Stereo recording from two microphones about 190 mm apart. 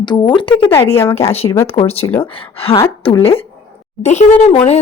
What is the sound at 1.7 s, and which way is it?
Speech, 30° left (ahead or behind).